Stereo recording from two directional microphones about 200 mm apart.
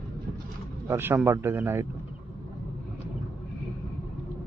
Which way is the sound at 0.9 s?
10° right (ahead or behind).